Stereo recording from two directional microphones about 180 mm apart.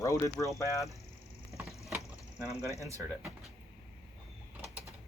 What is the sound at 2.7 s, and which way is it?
Speech, 15° right (ahead or behind).